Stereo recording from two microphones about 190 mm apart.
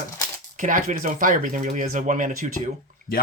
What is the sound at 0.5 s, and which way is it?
Speech, 45° right (ahead or behind).